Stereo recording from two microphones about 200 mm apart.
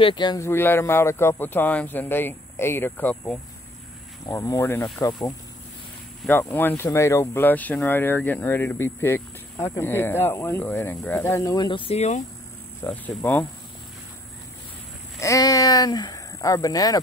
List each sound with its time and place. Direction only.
0.0 s speech: 25° left (ahead or behind)
12.8 s speech: 10° left (ahead or behind)
15.1 s speech: 15° left (ahead or behind)